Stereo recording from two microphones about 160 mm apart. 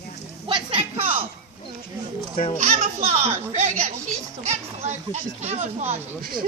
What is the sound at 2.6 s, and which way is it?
Speech, 45° right (ahead or behind).